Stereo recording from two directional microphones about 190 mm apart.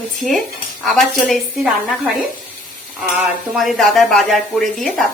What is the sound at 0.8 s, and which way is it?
Speech, centre (ahead or behind).